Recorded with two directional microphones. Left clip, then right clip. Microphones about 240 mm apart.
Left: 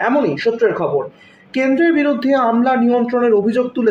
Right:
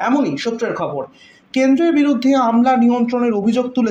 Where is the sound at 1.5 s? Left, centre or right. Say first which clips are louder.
Even; right.